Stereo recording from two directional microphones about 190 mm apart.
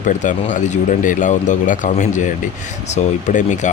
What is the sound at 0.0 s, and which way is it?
Speech, 40° left (ahead or behind).